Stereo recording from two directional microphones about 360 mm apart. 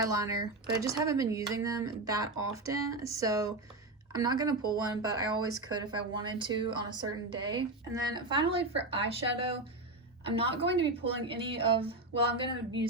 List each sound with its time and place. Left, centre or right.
0.1 s speech: centre